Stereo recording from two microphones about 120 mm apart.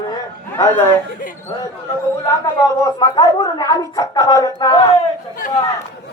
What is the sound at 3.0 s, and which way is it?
A woman's voice, 35° left (ahead or behind).